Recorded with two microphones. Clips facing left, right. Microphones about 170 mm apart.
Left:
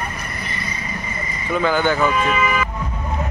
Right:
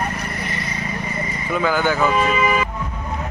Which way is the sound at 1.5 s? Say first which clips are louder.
Left 1 dB; 5° right (ahead or behind).